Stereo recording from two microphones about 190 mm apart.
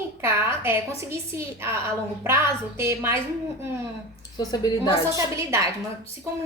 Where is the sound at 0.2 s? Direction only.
10° right (ahead or behind).